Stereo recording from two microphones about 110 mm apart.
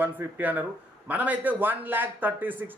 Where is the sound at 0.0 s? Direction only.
15° right (ahead or behind).